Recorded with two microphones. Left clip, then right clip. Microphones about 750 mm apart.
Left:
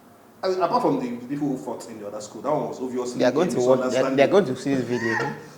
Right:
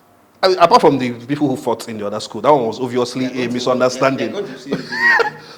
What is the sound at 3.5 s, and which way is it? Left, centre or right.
Speech, right.